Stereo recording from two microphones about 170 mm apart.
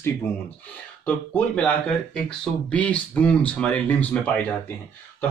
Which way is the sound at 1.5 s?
5° left (ahead or behind).